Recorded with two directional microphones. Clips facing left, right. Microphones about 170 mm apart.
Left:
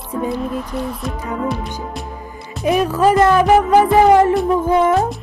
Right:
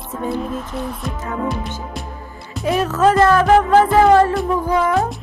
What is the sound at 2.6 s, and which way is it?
A woman's voice, 15° left (ahead or behind).